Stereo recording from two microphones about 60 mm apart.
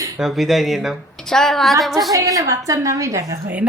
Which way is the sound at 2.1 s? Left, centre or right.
Right.